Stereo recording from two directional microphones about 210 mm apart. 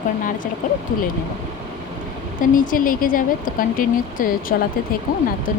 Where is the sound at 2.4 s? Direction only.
40° left (ahead or behind).